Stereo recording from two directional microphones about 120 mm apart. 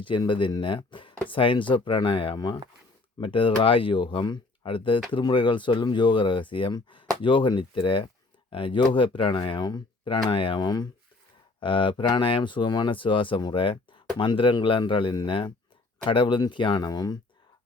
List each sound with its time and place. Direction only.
0.0 s speech: 45° left (ahead or behind)